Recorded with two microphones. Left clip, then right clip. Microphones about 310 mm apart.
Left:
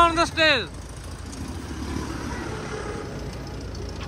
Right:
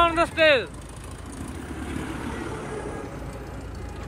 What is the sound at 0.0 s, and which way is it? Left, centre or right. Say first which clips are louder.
Vehicle: left 1 dB; centre.